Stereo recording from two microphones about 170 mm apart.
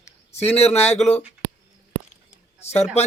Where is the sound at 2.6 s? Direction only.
40° left (ahead or behind).